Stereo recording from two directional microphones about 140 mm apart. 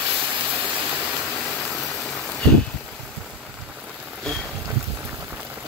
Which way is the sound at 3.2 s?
10° right (ahead or behind).